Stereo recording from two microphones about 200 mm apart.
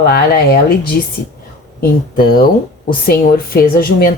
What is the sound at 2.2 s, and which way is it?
Speech, 50° left (ahead or behind).